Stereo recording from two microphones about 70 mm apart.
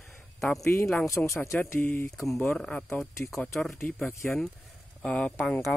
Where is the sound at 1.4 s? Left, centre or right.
Left.